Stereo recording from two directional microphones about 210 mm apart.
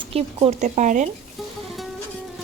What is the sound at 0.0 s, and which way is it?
A child's voice, 25° right (ahead or behind).